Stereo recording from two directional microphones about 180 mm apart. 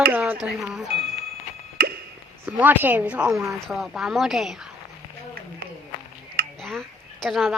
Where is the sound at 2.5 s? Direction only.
10° right (ahead or behind).